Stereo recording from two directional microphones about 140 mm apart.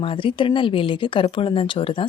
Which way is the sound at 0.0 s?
40° left (ahead or behind).